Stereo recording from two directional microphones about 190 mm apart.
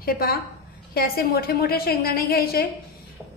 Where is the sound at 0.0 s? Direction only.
50° left (ahead or behind).